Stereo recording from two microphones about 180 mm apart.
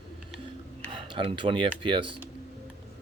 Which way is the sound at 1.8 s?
30° right (ahead or behind).